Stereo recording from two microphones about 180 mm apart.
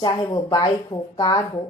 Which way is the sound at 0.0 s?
25° left (ahead or behind).